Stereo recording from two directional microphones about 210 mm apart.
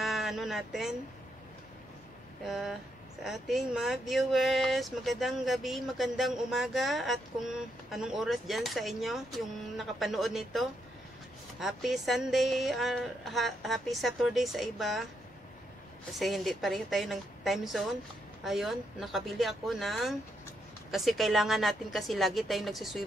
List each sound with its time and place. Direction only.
0.0 s a sound: centre (ahead or behind)
2.4 s speech: centre (ahead or behind)
16.1 s speech: centre (ahead or behind)